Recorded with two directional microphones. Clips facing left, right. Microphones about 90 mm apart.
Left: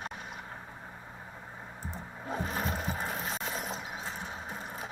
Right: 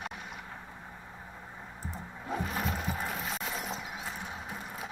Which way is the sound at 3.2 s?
40° left (ahead or behind).